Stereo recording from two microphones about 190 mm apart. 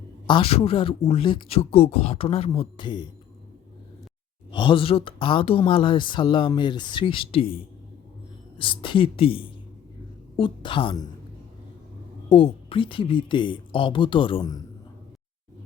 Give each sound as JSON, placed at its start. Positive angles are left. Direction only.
{"t": 0.3, "sound": "speech", "side_deg": 30}
{"t": 4.5, "sound": "speech", "side_deg": 25}
{"t": 8.5, "sound": "speech", "side_deg": 25}
{"t": 12.3, "sound": "speech", "side_deg": 30}